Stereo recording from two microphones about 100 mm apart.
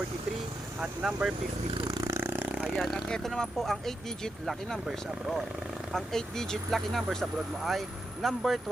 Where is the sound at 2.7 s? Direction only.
Centre (ahead or behind).